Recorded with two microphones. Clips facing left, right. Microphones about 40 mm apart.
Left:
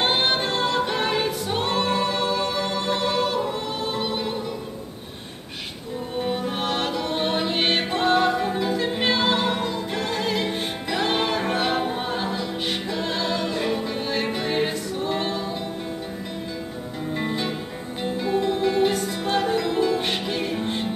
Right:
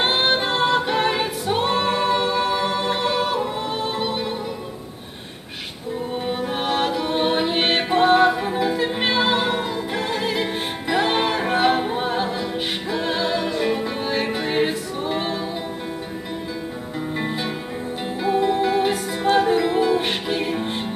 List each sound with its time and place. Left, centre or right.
0.0 s music: centre
6.1 s music: centre
17.1 s music: centre